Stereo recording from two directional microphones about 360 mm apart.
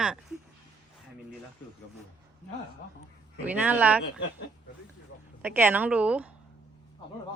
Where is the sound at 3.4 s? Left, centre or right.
Centre.